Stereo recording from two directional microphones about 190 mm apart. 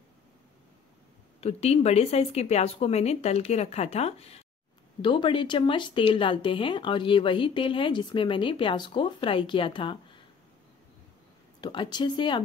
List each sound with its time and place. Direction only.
1.4 s speech: 35° left (ahead or behind)
11.6 s speech: 25° left (ahead or behind)